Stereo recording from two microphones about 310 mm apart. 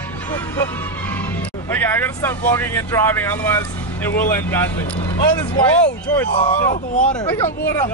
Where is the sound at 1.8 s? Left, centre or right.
Centre.